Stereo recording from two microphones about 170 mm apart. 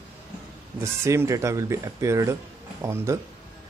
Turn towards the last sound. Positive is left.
turn(degrees=-15)  # may be behind; listen again after turning